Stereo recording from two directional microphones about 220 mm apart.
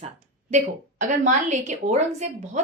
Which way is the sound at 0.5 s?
35° right (ahead or behind).